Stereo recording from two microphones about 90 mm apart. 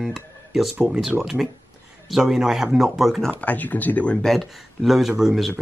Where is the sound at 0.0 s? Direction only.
5° right (ahead or behind).